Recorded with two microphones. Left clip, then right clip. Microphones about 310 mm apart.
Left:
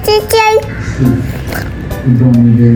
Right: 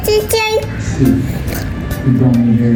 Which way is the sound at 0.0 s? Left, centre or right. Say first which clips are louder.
Left 5 dB; centre.